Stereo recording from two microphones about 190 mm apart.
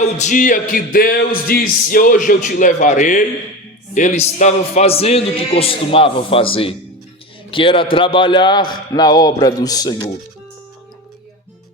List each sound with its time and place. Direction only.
0.0 s a man's voice: 40° left (ahead or behind); by 10.1 s 20° left (ahead or behind)